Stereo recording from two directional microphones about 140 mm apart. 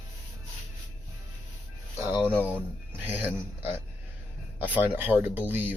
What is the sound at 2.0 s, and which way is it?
Speech, 15° right (ahead or behind).